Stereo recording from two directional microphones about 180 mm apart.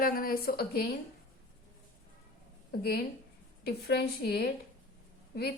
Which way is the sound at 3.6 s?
60° left (ahead or behind).